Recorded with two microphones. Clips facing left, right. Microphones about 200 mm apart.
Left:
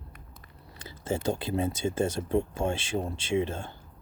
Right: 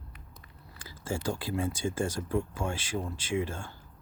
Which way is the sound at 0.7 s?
20° left (ahead or behind).